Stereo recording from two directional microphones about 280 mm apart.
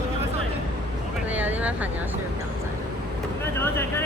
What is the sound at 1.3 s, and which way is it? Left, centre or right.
Vehicle, centre.